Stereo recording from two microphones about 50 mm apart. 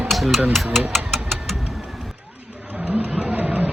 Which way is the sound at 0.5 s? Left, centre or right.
Centre.